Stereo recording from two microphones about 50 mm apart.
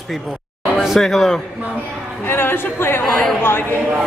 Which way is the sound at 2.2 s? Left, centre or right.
Left.